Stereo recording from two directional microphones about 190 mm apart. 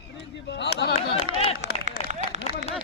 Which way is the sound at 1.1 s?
30° left (ahead or behind).